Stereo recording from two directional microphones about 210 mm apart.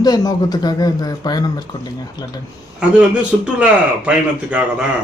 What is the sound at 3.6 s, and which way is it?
A man's voice, 5° right (ahead or behind).